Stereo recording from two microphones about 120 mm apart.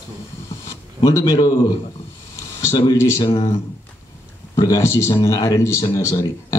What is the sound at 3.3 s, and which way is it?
Speech, 50° left (ahead or behind).